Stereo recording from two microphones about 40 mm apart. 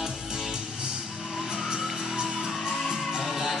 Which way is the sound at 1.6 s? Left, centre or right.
Centre.